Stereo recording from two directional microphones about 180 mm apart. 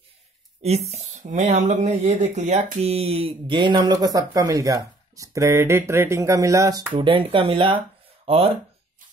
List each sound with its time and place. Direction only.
0.6 s speech: 35° right (ahead or behind)